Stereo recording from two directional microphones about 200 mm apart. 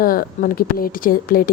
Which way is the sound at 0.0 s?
45° left (ahead or behind).